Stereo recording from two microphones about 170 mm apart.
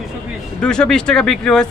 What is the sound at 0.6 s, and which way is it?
Speech, 5° left (ahead or behind).